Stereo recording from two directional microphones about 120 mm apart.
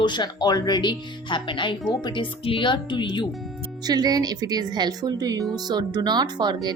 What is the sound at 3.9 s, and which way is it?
Speech, 35° right (ahead or behind).